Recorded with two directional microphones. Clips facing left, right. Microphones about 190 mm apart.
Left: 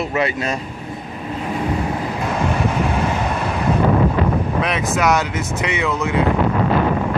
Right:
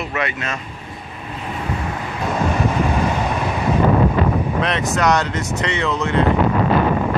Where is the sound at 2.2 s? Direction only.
Centre (ahead or behind).